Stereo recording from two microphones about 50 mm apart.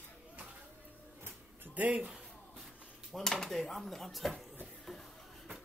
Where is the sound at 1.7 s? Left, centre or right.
Right.